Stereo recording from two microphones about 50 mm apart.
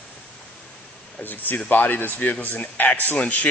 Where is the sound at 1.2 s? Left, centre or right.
Left.